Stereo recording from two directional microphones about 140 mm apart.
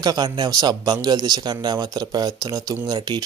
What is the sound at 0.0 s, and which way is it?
Speech, 30° right (ahead or behind).